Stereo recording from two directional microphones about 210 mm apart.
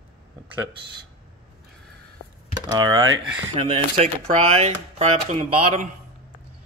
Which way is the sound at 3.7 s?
30° right (ahead or behind).